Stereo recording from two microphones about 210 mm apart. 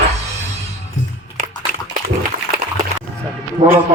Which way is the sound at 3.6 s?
30° right (ahead or behind).